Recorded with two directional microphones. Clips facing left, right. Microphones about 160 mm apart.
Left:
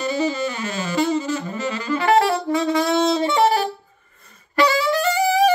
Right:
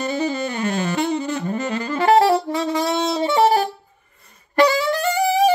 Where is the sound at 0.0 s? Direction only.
55° right (ahead or behind); by 3.3 s 30° right (ahead or behind).